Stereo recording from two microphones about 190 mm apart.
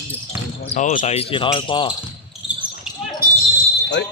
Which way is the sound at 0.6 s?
40° left (ahead or behind).